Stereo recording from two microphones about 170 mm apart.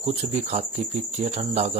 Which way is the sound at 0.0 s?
40° right (ahead or behind).